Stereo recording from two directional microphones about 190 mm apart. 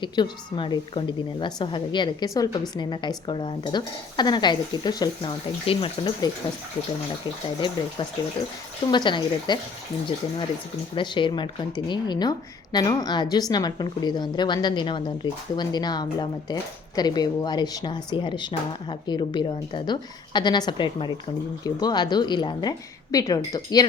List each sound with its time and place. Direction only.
0.0 s speech: 25° left (ahead or behind)
8.9 s speech: 25° left (ahead or behind)
10.9 s speech: 25° left (ahead or behind)